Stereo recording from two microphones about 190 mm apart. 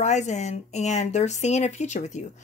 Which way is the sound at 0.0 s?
40° left (ahead or behind).